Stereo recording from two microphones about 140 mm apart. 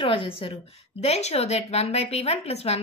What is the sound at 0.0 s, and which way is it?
A woman's voice, 40° left (ahead or behind).